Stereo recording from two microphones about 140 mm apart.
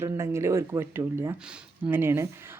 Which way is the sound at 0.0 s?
20° right (ahead or behind).